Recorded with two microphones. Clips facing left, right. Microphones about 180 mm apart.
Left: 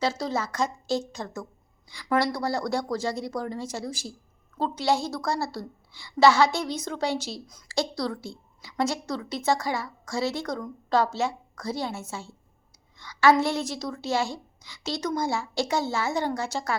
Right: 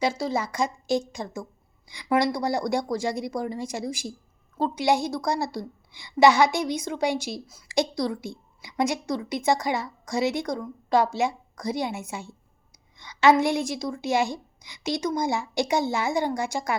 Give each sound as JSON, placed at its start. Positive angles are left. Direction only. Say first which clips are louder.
{"t": 0.0, "sound": "a woman's voice", "louder": "right 2 dB", "side_deg": -10}